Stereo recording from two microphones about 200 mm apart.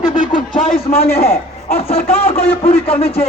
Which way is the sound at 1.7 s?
30° left (ahead or behind).